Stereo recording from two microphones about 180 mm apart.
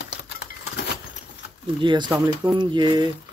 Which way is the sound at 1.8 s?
25° right (ahead or behind).